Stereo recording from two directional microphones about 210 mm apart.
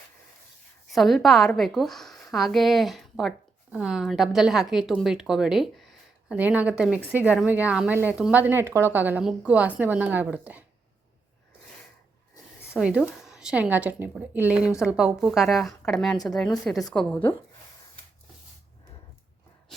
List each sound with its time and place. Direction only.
0.9 s a woman's voice: centre (ahead or behind)
12.8 s a woman's voice: 5° right (ahead or behind)